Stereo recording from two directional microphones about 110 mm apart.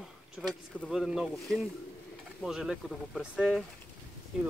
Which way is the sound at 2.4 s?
5° right (ahead or behind).